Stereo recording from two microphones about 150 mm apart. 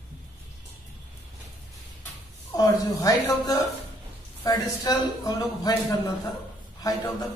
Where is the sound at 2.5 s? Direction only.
25° left (ahead or behind).